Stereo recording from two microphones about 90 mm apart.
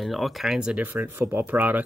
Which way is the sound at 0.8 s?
20° right (ahead or behind).